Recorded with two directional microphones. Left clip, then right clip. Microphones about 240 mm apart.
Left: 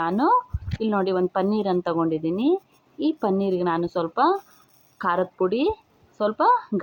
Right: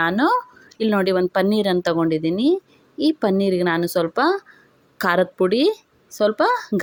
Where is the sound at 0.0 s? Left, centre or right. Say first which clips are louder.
Right 2 dB; right.